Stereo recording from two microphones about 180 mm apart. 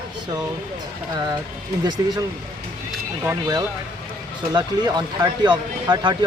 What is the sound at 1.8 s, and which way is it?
Speech, 25° right (ahead or behind).